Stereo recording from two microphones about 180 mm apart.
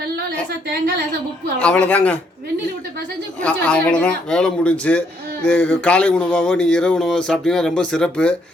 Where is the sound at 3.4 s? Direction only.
5° left (ahead or behind).